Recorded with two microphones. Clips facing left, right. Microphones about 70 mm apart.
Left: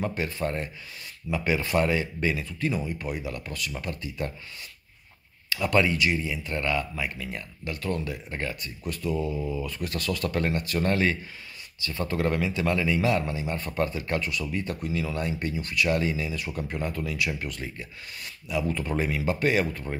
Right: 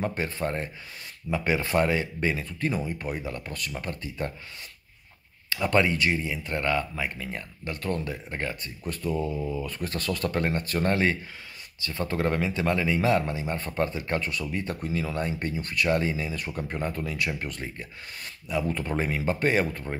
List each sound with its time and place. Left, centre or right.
0.0 s speech: right
1.3 s speech: right
5.5 s speech: right
9.1 s speech: centre
9.6 s speech: right